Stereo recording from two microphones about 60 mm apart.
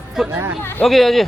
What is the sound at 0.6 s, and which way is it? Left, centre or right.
Speech, left.